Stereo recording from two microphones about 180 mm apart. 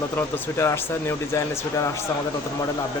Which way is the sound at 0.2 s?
15° left (ahead or behind).